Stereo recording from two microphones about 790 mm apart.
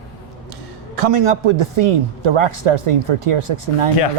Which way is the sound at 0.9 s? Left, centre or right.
Right.